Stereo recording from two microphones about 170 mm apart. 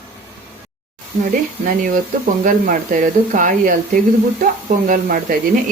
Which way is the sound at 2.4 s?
50° right (ahead or behind).